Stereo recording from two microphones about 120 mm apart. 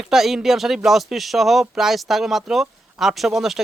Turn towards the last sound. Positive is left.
turn(degrees=0)  # may be behind; listen again after turning